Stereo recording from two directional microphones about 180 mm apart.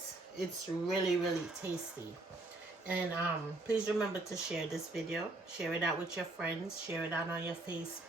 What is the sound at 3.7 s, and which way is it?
Speech, 5° right (ahead or behind).